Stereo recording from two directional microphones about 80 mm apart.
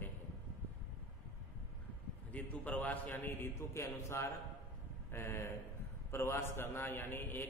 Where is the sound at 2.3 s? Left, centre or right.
Centre.